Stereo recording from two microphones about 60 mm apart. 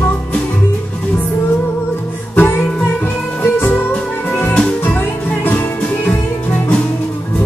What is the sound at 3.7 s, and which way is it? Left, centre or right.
Music, left.